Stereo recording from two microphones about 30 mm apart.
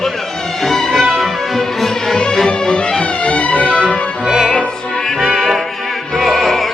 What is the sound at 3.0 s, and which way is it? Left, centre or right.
Music, left.